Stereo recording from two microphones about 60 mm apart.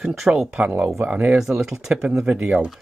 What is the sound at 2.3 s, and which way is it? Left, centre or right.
Speech, right.